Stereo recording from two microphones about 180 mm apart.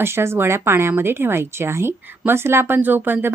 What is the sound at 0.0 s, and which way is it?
A woman's voice, 15° right (ahead or behind).